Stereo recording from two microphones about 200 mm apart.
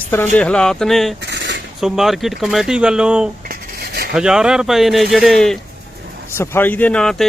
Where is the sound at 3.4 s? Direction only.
50° right (ahead or behind).